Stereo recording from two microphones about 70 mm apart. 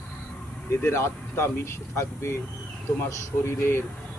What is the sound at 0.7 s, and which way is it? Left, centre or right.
A man's voice, left.